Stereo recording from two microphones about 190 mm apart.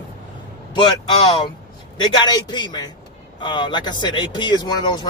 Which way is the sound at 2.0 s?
20° left (ahead or behind).